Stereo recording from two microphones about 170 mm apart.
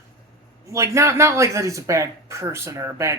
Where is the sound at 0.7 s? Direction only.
15° right (ahead or behind).